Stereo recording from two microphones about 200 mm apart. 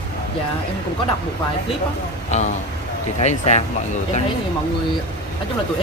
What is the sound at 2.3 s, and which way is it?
A man's voice, 35° left (ahead or behind).